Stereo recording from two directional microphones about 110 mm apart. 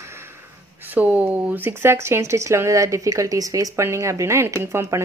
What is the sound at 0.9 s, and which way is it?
A woman's voice, 15° right (ahead or behind).